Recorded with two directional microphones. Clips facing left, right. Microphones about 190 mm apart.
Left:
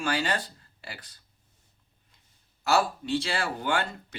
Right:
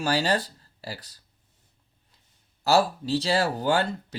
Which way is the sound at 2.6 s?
35° right (ahead or behind).